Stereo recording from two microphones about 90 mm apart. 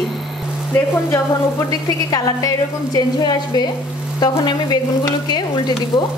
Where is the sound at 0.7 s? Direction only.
30° left (ahead or behind).